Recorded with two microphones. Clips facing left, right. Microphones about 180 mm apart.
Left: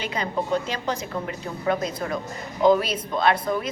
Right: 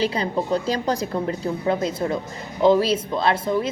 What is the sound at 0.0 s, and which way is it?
A woman's voice, 35° right (ahead or behind).